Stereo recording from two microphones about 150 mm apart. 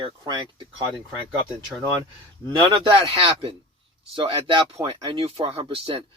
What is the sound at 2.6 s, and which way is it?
Speech, 30° right (ahead or behind).